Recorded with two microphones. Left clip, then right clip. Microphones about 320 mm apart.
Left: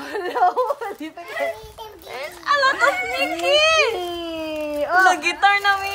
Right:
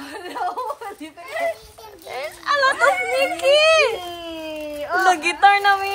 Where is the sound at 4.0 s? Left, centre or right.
Left.